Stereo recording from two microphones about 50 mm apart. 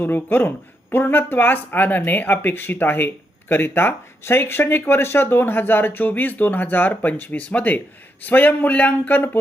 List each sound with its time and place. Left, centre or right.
0.0 s speech: left